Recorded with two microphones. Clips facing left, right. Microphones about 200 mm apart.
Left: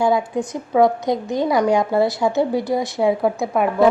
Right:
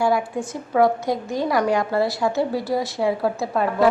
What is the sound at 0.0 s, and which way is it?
A woman's voice, 20° left (ahead or behind).